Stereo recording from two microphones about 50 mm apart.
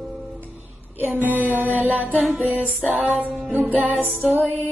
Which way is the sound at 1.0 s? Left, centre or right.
Right.